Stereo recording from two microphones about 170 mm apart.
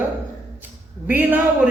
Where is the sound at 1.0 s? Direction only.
10° right (ahead or behind).